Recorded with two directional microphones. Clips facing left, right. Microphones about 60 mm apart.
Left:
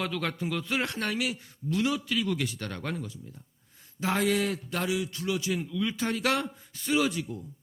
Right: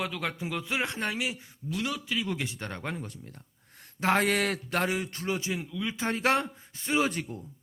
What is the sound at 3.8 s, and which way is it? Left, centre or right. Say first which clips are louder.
A man's voice: right 2 dB; right.